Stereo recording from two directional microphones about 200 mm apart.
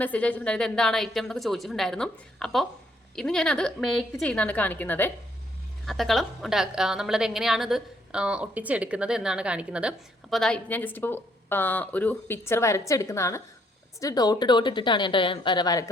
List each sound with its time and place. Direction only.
0.0 s a woman's voice: 5° left (ahead or behind)